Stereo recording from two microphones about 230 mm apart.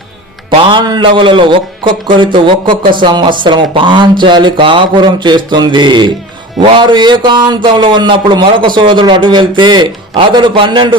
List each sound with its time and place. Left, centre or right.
0.7 s a man's voice: centre